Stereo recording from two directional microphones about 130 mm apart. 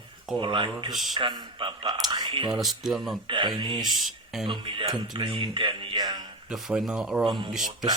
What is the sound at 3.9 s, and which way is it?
Speech, centre (ahead or behind).